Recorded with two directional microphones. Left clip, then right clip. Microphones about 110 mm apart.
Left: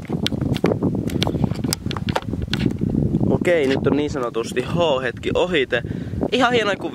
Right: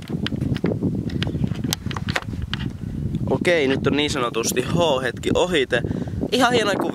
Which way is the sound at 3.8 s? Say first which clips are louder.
Even; 45° right (ahead or behind).